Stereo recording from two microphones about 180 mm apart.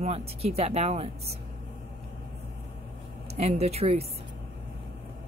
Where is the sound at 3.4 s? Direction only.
35° right (ahead or behind).